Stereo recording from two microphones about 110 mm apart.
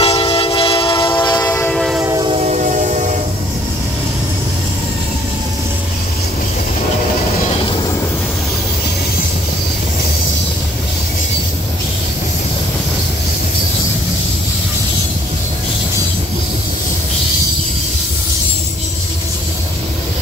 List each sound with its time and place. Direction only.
0.0 s train: 60° left (ahead or behind)
1.2 s train: 35° left (ahead or behind)
1.7 s train: centre (ahead or behind)
2.4 s train: 90° right